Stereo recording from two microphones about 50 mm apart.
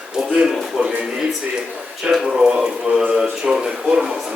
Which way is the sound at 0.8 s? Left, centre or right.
Right.